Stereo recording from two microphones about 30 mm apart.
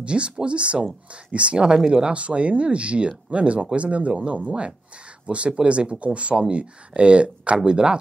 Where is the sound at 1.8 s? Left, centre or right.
Right.